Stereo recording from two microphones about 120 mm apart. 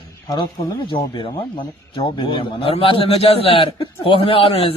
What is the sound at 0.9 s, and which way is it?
A man's voice, 45° left (ahead or behind).